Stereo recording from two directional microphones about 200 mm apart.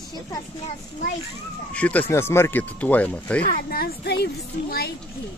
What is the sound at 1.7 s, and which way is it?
Speech, 5° left (ahead or behind).